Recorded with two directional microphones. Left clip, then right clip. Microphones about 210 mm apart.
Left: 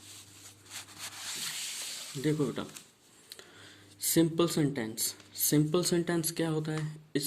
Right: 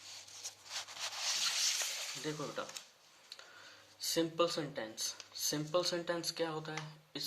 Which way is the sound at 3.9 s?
40° left (ahead or behind).